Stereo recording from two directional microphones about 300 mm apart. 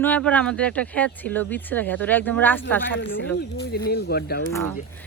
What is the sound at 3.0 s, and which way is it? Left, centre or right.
Speech, left.